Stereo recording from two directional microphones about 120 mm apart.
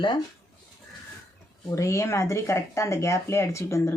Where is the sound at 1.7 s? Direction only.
25° left (ahead or behind).